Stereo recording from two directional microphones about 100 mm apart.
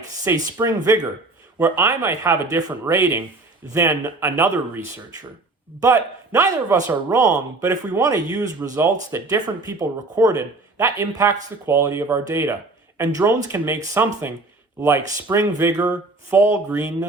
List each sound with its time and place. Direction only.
0.5 s speech: 30° right (ahead or behind)
2.9 s speech: 25° right (ahead or behind)